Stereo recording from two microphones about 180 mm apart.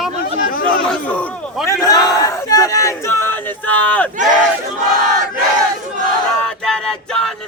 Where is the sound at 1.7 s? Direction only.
20° left (ahead or behind).